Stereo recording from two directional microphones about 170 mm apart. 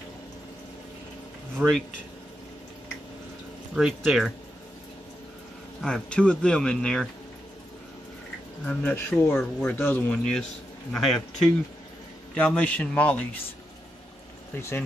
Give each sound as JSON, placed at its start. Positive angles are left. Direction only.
{"t": 1.6, "sound": "speech", "side_deg": -10}
{"t": 3.7, "sound": "a man's voice", "side_deg": 0}
{"t": 5.8, "sound": "a man's voice", "side_deg": 5}
{"t": 8.6, "sound": "a man's voice", "side_deg": 10}
{"t": 12.4, "sound": "speech", "side_deg": 10}
{"t": 14.5, "sound": "speech", "side_deg": 15}